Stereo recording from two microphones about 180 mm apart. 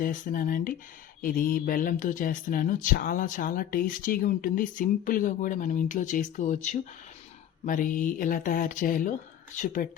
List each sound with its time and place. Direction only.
0.0 s speech: 50° left (ahead or behind)